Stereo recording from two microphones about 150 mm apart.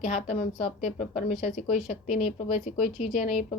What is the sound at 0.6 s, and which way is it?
A woman's voice, 45° left (ahead or behind).